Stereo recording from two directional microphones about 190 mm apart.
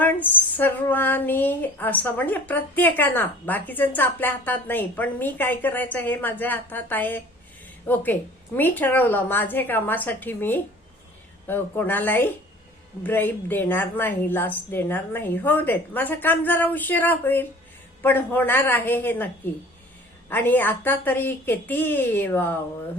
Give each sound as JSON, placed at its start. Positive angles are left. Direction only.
{"t": 0.0, "sound": "speech", "side_deg": 10}
{"t": 8.5, "sound": "speech", "side_deg": 10}
{"t": 20.3, "sound": "speech", "side_deg": 10}